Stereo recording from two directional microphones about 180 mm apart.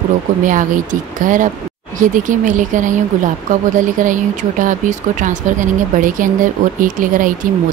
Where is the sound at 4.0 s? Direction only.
45° right (ahead or behind).